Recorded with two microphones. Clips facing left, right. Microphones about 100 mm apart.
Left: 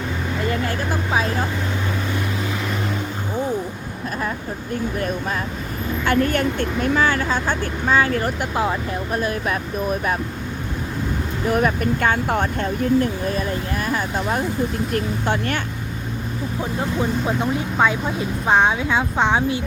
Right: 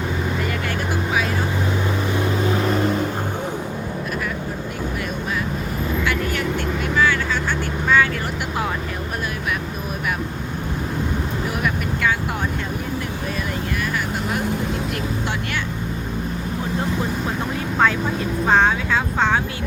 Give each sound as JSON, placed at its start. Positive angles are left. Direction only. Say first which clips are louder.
{"t": 6.1, "sound": "vehicle", "louder": "left 4 dB", "side_deg": 50}
{"t": 11.5, "sound": "speech", "louder": "left 5 dB", "side_deg": 45}
{"t": 13.8, "sound": "speech", "louder": "left 2 dB", "side_deg": 40}
{"t": 18.4, "sound": "speech", "louder": "even", "side_deg": 15}